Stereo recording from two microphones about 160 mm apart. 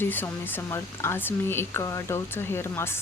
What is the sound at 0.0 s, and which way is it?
Speech, 10° left (ahead or behind).